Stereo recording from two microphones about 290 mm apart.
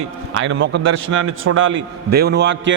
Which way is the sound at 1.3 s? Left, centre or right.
Right.